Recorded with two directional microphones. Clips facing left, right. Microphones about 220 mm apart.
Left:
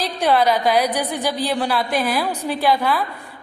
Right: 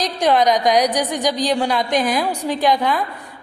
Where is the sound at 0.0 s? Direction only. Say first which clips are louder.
Right 1 dB; 15° right (ahead or behind).